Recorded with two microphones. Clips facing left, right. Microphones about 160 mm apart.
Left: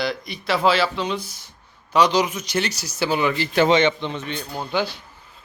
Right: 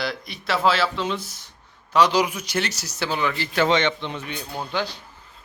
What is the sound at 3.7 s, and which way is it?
Speech, 5° left (ahead or behind).